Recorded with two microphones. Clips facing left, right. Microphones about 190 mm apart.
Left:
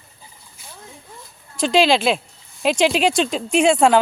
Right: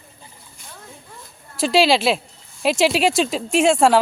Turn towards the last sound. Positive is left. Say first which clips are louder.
# left 1 dB
turn(degrees=0)  # may be behind; listen again after turning